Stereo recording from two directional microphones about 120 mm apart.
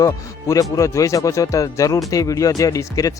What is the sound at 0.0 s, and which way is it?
Speech, 30° left (ahead or behind).